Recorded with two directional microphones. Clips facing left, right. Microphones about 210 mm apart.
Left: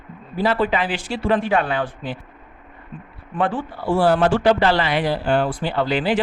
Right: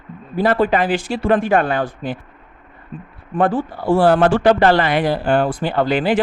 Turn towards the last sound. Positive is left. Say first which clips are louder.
# right 3 dB
turn(degrees=-50)  # may be behind; listen again after turning